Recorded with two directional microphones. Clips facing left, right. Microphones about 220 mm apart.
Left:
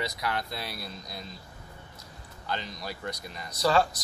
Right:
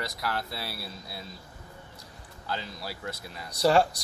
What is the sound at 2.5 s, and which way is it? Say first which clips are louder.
Speech: left 1 dB; 5° right (ahead or behind).